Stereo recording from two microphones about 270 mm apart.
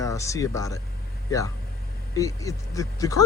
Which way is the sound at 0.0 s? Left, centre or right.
Centre.